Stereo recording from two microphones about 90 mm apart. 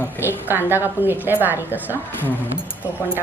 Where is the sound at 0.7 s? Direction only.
25° right (ahead or behind).